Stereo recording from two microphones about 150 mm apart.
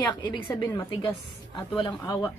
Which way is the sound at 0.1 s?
30° left (ahead or behind).